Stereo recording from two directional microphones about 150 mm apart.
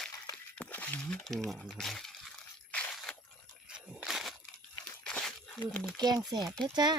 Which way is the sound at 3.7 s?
5° right (ahead or behind).